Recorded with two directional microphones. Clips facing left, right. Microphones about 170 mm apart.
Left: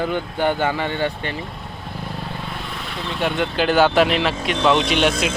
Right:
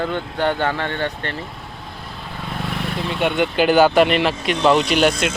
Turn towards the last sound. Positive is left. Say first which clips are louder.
# right 2 dB
turn(degrees=0)  # may be behind; listen again after turning